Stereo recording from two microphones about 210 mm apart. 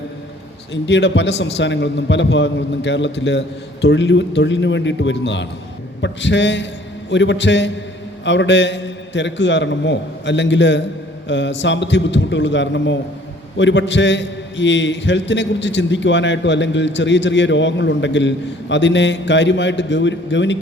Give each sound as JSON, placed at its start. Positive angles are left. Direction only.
{"t": 0.7, "sound": "a man's voice", "side_deg": 55}